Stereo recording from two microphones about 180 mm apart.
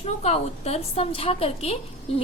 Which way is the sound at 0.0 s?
40° left (ahead or behind).